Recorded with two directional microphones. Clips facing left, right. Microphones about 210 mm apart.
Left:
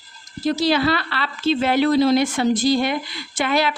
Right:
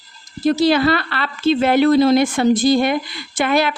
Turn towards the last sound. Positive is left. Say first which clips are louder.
# right 3 dB
turn(degrees=-50)  # may be behind; listen again after turning